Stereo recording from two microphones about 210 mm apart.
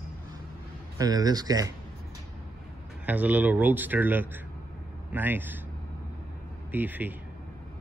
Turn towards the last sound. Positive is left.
turn(degrees=-10)  # may be behind; listen again after turning